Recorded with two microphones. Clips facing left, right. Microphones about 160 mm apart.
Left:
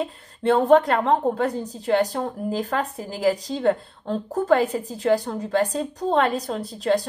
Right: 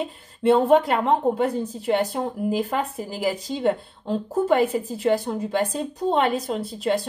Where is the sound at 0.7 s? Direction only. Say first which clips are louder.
Left 1 dB; 5° right (ahead or behind).